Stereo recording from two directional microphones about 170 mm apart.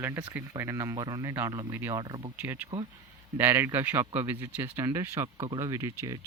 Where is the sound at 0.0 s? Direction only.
10° right (ahead or behind).